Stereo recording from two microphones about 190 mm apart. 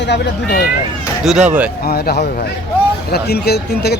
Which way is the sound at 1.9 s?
55° left (ahead or behind).